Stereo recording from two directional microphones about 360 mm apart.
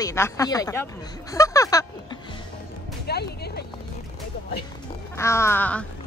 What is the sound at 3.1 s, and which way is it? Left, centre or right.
Speech, left.